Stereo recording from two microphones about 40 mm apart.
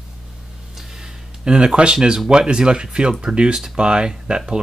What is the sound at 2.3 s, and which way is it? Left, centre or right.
Speech, right.